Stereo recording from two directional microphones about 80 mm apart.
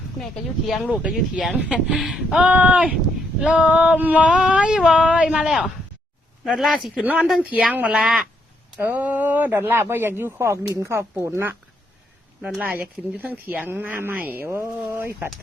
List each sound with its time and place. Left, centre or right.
0.9 s a sound: centre
2.0 s speech: centre
2.5 s speech: centre
3.4 s a sound: centre
6.4 s speech: centre
7.0 s speech: right
7.9 s a sound: centre
8.8 s speech: right
12.5 s speech: right